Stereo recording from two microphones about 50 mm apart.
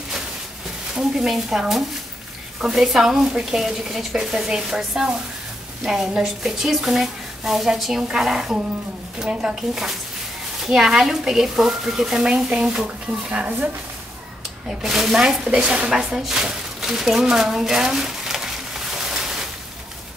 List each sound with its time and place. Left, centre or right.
0.9 s speech: centre
10.6 s speech: centre
14.8 s speech: centre